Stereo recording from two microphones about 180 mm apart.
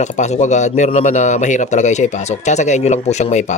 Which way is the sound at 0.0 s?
40° left (ahead or behind).